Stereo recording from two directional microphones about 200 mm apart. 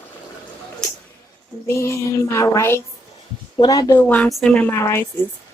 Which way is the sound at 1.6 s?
15° left (ahead or behind).